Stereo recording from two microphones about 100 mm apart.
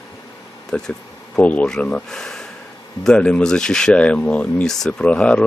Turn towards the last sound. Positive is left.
turn(degrees=10)  # may be behind; listen again after turning